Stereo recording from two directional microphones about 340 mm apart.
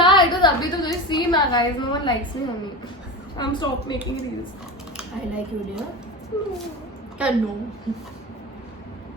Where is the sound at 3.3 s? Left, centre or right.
Centre.